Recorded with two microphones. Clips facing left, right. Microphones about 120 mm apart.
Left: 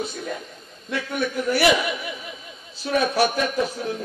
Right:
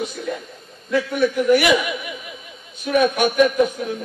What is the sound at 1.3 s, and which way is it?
Speech, 35° left (ahead or behind).